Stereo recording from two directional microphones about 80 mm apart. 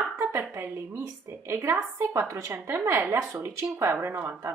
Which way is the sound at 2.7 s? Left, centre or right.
Right.